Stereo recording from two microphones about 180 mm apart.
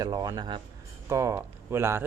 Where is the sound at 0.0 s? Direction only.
20° right (ahead or behind).